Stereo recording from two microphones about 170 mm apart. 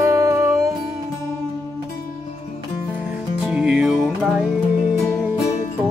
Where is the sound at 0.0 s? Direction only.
15° right (ahead or behind).